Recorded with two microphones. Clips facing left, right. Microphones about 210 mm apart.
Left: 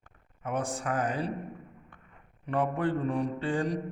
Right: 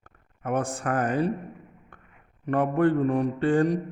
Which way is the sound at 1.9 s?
50° right (ahead or behind).